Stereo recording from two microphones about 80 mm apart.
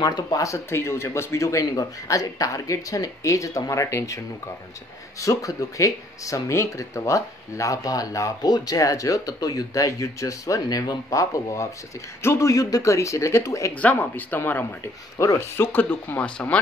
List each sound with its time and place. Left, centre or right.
0.0 s speech: left
5.2 s speech: left
13.7 s speech: left
15.1 s speech: left; by 16.5 s centre